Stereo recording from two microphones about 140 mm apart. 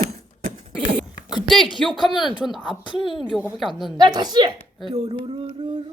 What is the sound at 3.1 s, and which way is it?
Speech, centre (ahead or behind).